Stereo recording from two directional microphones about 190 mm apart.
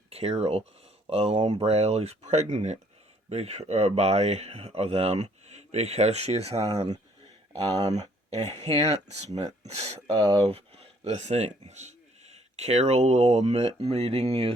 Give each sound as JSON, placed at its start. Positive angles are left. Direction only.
{"t": 0.1, "sound": "speech", "side_deg": -35}
{"t": 8.3, "sound": "speech", "side_deg": -35}